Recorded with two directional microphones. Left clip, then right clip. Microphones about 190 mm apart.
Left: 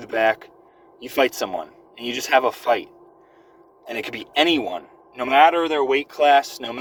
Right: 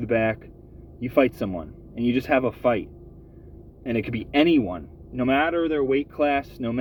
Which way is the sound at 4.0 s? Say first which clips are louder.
Left 2 dB; 20° right (ahead or behind).